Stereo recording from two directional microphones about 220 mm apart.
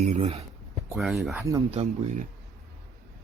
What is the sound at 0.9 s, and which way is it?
Speech, centre (ahead or behind).